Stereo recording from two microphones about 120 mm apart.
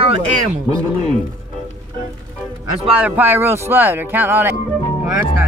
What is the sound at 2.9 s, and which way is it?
Speech, 15° right (ahead or behind).